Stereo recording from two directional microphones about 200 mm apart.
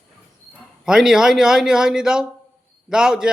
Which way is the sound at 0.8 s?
Centre (ahead or behind).